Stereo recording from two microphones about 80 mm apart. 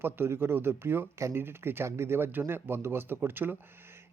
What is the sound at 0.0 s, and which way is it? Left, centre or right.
Speech, right.